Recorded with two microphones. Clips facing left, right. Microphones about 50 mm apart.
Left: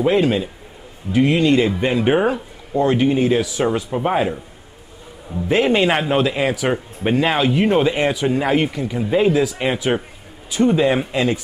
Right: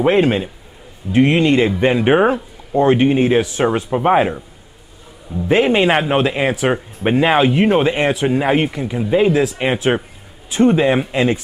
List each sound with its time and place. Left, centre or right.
0.0 s speech: right
5.5 s speech: centre